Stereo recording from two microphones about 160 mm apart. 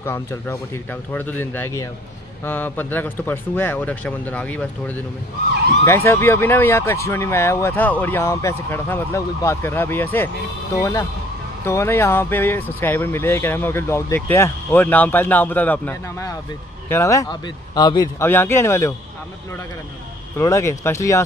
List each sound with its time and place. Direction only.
0.0 s speech: 15° left (ahead or behind)
18.2 s speech: 15° left (ahead or behind)
20.3 s speech: 20° left (ahead or behind)